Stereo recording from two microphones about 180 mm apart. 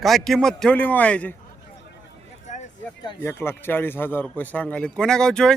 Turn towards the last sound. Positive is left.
turn(degrees=5)  # may be behind; listen again after turning